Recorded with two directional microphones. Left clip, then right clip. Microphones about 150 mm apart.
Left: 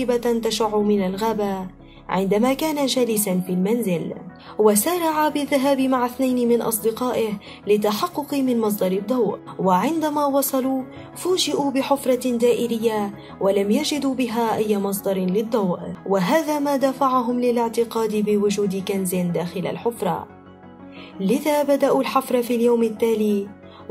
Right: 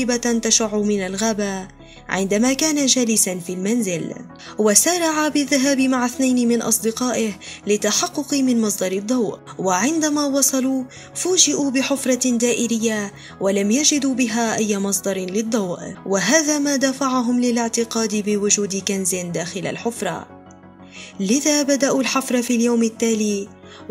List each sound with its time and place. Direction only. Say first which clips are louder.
0.0 s speech: even; 50° right (ahead or behind)
21.2 s speech: right 1 dB; 55° right (ahead or behind)